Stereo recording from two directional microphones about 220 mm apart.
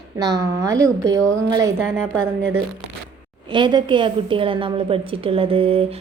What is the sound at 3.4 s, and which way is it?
A woman's voice, 20° right (ahead or behind).